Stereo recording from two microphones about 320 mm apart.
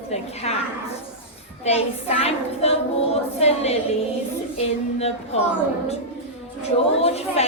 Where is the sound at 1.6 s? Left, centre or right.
Centre.